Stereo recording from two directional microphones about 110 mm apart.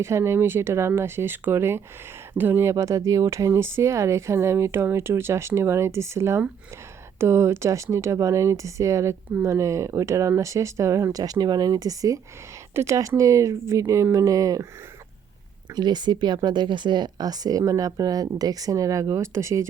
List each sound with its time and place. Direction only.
0.0 s speech: 25° right (ahead or behind)
15.7 s speech: 40° right (ahead or behind)